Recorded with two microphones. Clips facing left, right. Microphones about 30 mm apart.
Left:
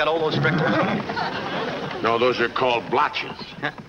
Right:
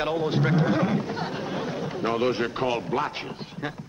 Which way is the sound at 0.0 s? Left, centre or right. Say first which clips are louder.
Left 4 dB; left.